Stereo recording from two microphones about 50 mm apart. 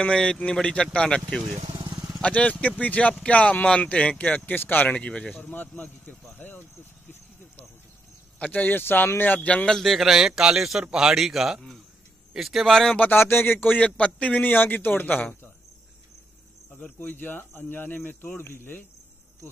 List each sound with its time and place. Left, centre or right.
0.0 s speech: centre
2.2 s speech: left
4.6 s speech: left
4.9 s speech: left
5.4 s speech: left
8.4 s speech: left
9.7 s speech: centre
10.0 s a man's voice: centre
12.6 s speech: centre
13.1 s speech: left
13.7 s speech: left
14.4 s speech: left
17.1 s speech: left
18.4 s speech: left